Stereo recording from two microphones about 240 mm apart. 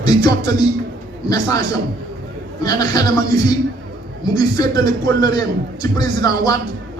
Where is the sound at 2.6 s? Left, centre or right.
Centre.